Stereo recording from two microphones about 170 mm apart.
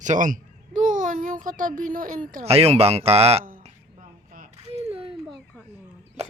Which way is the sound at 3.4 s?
50° right (ahead or behind).